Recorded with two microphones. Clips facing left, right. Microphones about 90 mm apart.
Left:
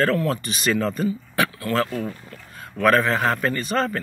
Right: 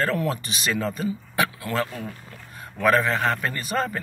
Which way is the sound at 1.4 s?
15° right (ahead or behind).